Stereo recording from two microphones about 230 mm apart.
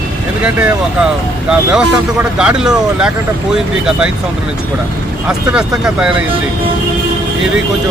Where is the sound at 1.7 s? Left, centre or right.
Centre.